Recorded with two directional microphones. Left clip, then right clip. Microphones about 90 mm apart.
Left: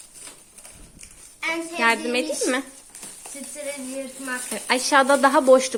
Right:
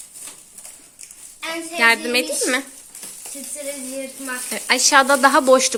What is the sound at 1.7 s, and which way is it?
Speech, 15° left (ahead or behind).